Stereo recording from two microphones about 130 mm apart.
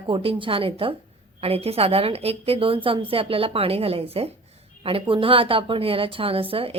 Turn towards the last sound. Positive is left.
turn(degrees=-45)  # may be behind; listen again after turning